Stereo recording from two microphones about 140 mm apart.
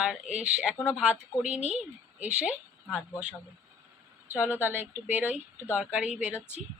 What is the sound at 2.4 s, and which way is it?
Speech, 10° right (ahead or behind).